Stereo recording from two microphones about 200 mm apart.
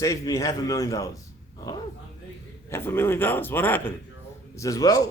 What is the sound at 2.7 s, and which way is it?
A man's voice, 10° left (ahead or behind).